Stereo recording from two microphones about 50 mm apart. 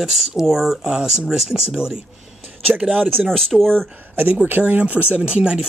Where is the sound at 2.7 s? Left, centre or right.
Right.